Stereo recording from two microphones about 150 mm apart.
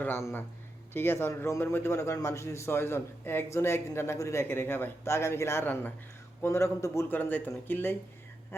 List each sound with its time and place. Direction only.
0.0 s a man's voice: 15° left (ahead or behind)